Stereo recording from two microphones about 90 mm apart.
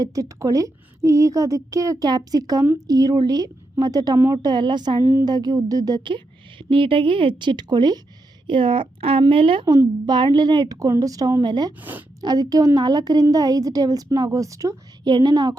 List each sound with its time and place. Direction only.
0.0 s a woman's voice: 40° right (ahead or behind)
6.1 s a woman's voice: 65° right (ahead or behind)
8.4 s speech: 70° right (ahead or behind)
9.6 s a woman's voice: 55° right (ahead or behind)
11.8 s a woman's voice: 20° right (ahead or behind)
12.2 s a woman's voice: 45° right (ahead or behind)
15.0 s a woman's voice: 50° right (ahead or behind)